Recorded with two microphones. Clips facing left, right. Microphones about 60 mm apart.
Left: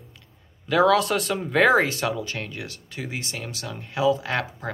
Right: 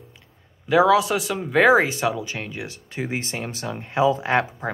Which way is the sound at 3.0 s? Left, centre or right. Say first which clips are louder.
Right 4 dB; right.